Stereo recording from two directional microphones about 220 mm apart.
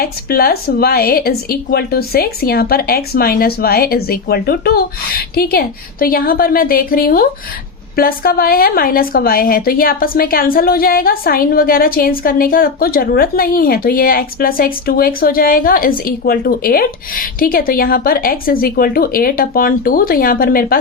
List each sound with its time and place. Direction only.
0.0 s a woman's voice: 45° left (ahead or behind)